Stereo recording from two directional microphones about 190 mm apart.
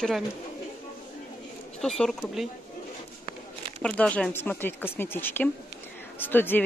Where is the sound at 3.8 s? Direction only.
5° left (ahead or behind).